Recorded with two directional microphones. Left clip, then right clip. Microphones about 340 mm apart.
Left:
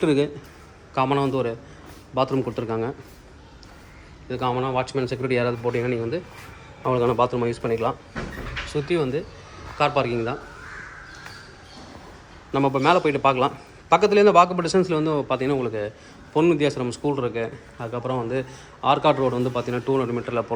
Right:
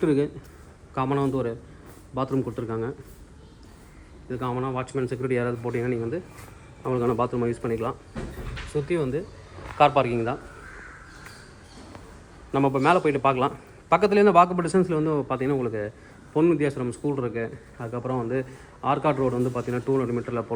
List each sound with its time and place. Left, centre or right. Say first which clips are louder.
0.0 s speech: left 2 dB; centre
4.3 s speech: left 5 dB; centre
12.5 s speech: left 2 dB; centre